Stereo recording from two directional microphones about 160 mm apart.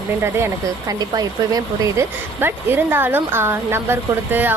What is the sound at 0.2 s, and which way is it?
Speech, 15° right (ahead or behind).